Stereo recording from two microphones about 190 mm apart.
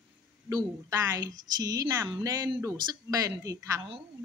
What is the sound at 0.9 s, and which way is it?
A woman's voice, 20° right (ahead or behind).